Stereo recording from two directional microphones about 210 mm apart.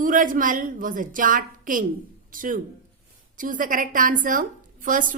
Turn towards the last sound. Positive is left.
turn(degrees=-40)  # may be behind; listen again after turning